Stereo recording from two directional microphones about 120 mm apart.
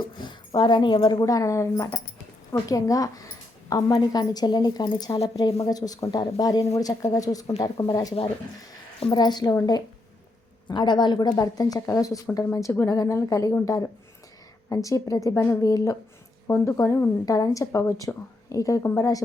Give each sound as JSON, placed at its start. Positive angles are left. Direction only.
{"t": 0.2, "sound": "speech", "side_deg": 40}
{"t": 5.1, "sound": "speech", "side_deg": 60}
{"t": 5.6, "sound": "speech", "side_deg": 30}